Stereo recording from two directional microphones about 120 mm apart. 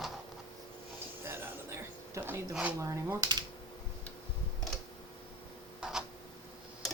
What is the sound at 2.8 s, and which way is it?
Speech, 25° right (ahead or behind).